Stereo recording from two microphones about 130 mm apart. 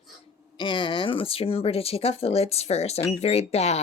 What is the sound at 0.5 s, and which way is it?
Speech, 40° left (ahead or behind).